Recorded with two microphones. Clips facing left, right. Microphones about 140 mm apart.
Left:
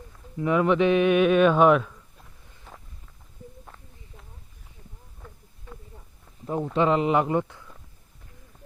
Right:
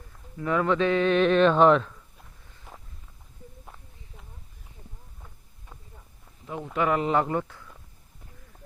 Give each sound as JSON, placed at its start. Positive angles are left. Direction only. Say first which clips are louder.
{"t": 0.3, "sound": "speech", "louder": "left 3 dB", "side_deg": 15}
{"t": 2.7, "sound": "wind noise", "louder": "even", "side_deg": -10}
{"t": 3.7, "sound": "a sound", "louder": "even", "side_deg": -10}
{"t": 6.7, "sound": "a man's voice", "louder": "left 2 dB", "side_deg": 20}